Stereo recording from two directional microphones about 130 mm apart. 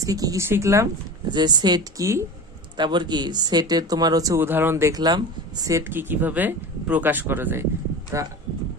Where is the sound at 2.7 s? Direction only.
35° right (ahead or behind).